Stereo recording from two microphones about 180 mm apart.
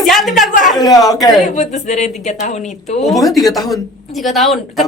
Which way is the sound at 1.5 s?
40° left (ahead or behind).